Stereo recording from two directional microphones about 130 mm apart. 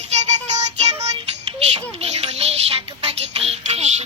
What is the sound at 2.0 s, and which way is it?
Music, 55° right (ahead or behind).